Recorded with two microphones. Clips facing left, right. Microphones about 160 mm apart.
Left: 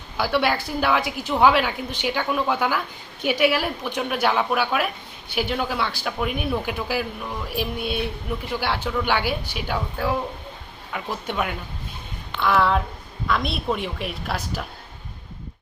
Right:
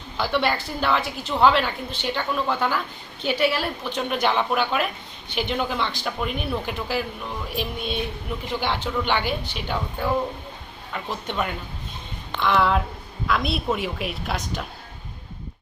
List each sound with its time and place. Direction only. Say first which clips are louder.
0.2 s a woman's voice: left 1 dB; 10° left (ahead or behind)